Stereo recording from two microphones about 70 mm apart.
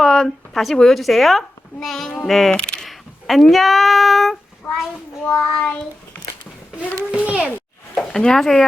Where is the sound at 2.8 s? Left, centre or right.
Centre.